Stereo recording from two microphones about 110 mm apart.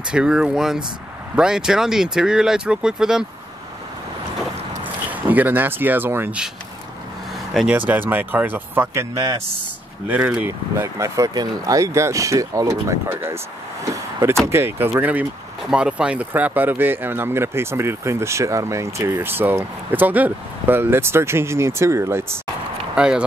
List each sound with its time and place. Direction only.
0.1 s speech: 10° right (ahead or behind)
4.8 s speech: 15° right (ahead or behind)
7.5 s speech: 10° right (ahead or behind)
10.0 s speech: 15° right (ahead or behind)
14.4 s speech: 20° right (ahead or behind)
22.9 s speech: 10° right (ahead or behind)